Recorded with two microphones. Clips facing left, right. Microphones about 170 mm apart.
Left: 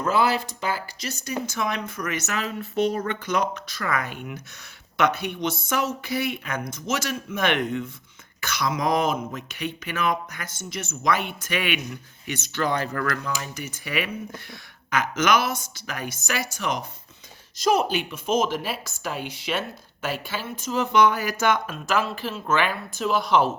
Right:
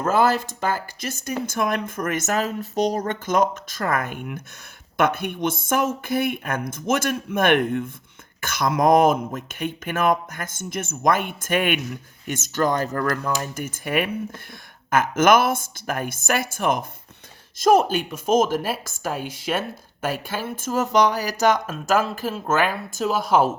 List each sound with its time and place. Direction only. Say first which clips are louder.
0.0 s speech: right 3 dB; 50° right (ahead or behind)